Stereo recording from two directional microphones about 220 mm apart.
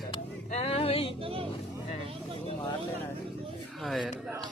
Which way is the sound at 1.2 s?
25° right (ahead or behind).